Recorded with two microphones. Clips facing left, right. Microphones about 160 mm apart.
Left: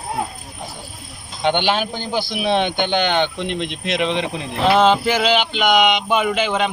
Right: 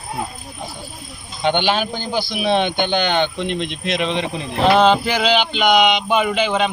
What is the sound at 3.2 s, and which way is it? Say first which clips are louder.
A man's voice: right 1 dB; 15° left (ahead or behind).